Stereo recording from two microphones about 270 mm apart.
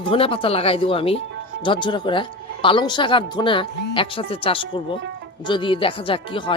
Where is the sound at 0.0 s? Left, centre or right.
Centre.